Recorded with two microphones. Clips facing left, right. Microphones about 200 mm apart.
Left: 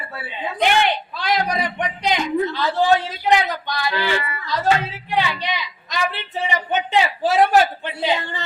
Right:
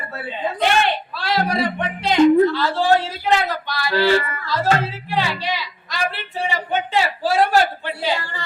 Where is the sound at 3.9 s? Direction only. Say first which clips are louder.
Right 10 dB; 45° right (ahead or behind).